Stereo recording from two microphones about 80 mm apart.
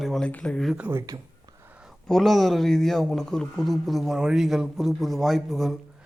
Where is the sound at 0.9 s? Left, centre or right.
Right.